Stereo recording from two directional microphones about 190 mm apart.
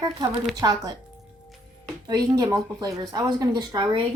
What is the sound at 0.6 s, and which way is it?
Speech, 20° right (ahead or behind).